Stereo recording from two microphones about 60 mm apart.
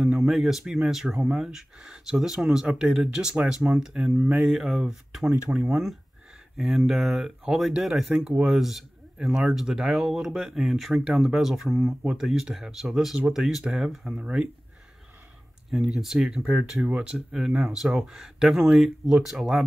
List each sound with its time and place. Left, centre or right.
0.0 s speech: centre
6.5 s speech: centre
14.1 s speech: centre
15.7 s speech: centre
18.1 s speech: centre